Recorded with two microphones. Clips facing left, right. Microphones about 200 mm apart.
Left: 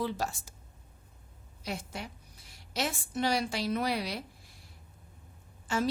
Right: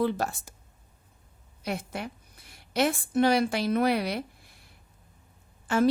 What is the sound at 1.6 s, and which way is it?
A woman's voice, 60° right (ahead or behind).